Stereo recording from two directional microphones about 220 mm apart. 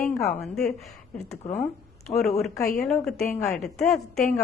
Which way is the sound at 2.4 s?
Centre (ahead or behind).